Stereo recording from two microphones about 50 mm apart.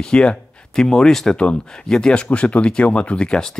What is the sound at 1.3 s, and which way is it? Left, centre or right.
Speech, left.